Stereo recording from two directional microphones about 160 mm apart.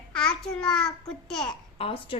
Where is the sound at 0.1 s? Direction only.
5° left (ahead or behind).